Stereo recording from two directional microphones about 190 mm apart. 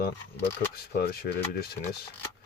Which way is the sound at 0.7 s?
55° left (ahead or behind).